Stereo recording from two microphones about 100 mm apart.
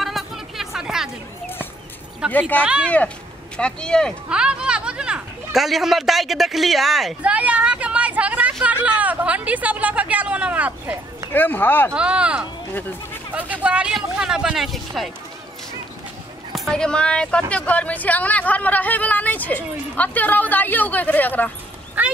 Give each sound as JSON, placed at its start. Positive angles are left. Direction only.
{"t": 0.0, "sound": "a sound", "side_deg": 0}
{"t": 2.2, "sound": "speech", "side_deg": -10}
{"t": 3.5, "sound": "speech", "side_deg": 10}
{"t": 4.3, "sound": "speech", "side_deg": -10}
{"t": 7.2, "sound": "vehicle", "side_deg": -15}
{"t": 8.6, "sound": "speech", "side_deg": -15}
{"t": 11.3, "sound": "speech", "side_deg": 20}
{"t": 11.9, "sound": "speech", "side_deg": -10}
{"t": 16.5, "sound": "speech", "side_deg": 5}